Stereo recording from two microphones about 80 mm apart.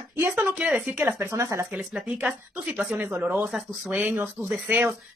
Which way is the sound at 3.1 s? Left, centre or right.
Right.